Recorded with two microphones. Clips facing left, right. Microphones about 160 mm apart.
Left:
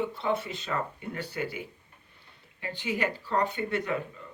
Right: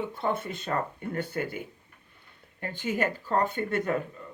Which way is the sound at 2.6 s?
50° right (ahead or behind).